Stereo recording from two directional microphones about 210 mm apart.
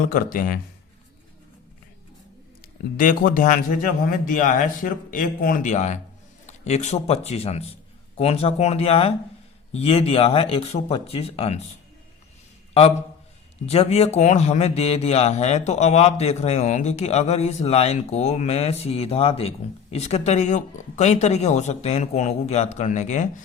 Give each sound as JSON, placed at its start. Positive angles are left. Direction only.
{"t": 0.0, "sound": "speech", "side_deg": 45}
{"t": 3.0, "sound": "speech", "side_deg": 40}
{"t": 13.7, "sound": "speech", "side_deg": 30}